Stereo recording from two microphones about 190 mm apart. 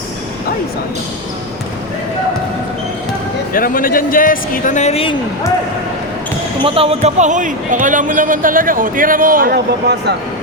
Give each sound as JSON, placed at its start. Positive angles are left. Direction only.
{"t": 3.5, "sound": "speech", "side_deg": 45}
{"t": 6.6, "sound": "a man's voice", "side_deg": -30}